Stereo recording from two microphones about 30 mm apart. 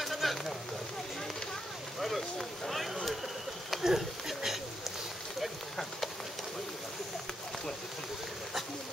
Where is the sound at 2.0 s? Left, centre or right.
Centre.